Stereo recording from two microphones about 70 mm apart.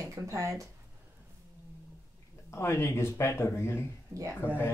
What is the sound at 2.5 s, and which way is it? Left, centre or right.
Speech, left.